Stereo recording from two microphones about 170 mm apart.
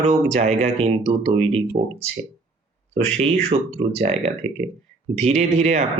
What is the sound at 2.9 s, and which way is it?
Speech, 35° right (ahead or behind).